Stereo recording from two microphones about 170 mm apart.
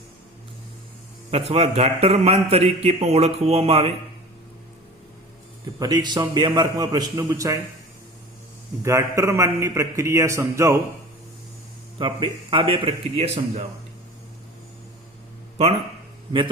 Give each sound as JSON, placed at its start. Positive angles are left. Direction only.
{"t": 1.3, "sound": "a man's voice", "side_deg": -35}
{"t": 5.8, "sound": "a man's voice", "side_deg": -25}
{"t": 8.8, "sound": "a man's voice", "side_deg": -15}
{"t": 11.9, "sound": "a man's voice", "side_deg": -30}